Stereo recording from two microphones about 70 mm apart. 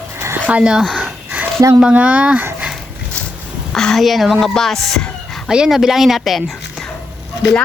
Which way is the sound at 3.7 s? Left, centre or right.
Centre.